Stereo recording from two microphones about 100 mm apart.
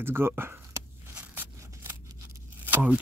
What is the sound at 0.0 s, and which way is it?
Speech, 25° right (ahead or behind).